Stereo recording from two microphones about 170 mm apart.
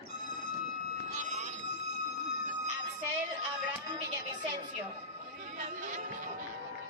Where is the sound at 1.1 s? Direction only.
45° right (ahead or behind).